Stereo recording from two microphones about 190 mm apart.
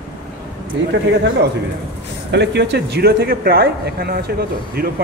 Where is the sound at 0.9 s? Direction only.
65° right (ahead or behind).